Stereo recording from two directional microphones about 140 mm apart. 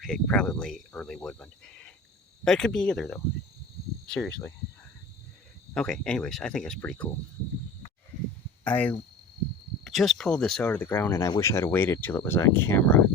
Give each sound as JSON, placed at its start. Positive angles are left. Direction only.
{"t": 0.0, "sound": "speech", "side_deg": 5}
{"t": 5.7, "sound": "speech", "side_deg": 5}
{"t": 8.6, "sound": "speech", "side_deg": 10}